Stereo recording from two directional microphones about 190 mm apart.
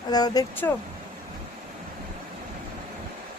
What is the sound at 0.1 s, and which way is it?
Speech, 20° left (ahead or behind).